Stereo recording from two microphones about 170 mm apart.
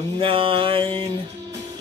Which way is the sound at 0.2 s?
30° right (ahead or behind).